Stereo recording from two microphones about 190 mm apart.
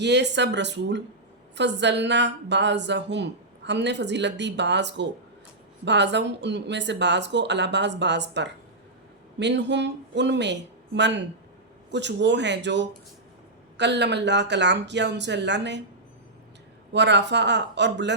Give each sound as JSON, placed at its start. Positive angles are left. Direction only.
{"t": 0.0, "sound": "a woman's voice", "side_deg": -65}
{"t": 16.9, "sound": "a woman's voice", "side_deg": -65}